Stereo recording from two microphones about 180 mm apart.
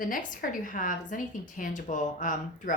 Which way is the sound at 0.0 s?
50° left (ahead or behind).